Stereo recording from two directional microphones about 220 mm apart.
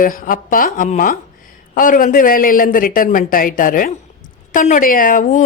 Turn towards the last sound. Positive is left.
turn(degrees=35)  # may be behind; listen again after turning